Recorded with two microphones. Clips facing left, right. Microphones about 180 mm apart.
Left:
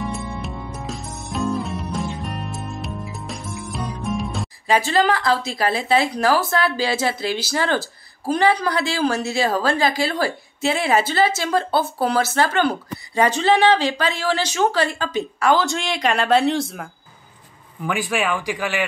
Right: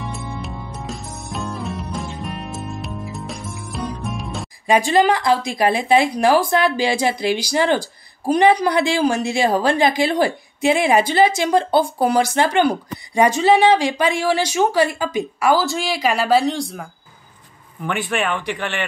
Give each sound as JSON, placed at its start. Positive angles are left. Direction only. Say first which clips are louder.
{"t": 0.0, "sound": "music", "louder": "left 2 dB", "side_deg": 0}
{"t": 4.6, "sound": "speech", "louder": "right 3 dB", "side_deg": -15}
{"t": 17.8, "sound": "speech", "louder": "even", "side_deg": 5}